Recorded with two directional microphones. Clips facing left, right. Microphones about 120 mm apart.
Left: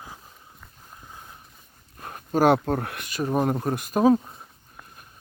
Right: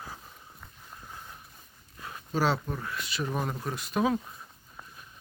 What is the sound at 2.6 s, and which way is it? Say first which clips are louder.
Speech: left 8 dB; 65° left (ahead or behind).